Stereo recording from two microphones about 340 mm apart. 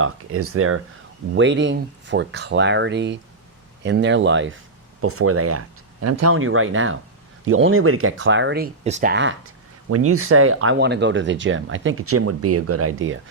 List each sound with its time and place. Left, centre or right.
0.0 s speech: right